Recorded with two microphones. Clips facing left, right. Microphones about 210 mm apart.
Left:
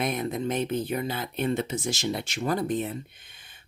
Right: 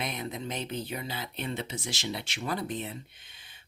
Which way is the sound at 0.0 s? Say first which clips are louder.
Left 7 dB; 50° left (ahead or behind).